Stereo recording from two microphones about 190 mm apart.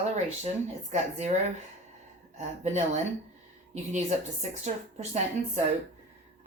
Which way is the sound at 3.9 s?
35° right (ahead or behind).